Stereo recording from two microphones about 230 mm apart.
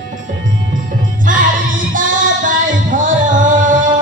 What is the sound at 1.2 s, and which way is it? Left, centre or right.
Music, right.